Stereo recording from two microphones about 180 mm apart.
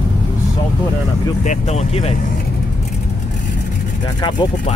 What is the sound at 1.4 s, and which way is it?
Speech, 40° left (ahead or behind).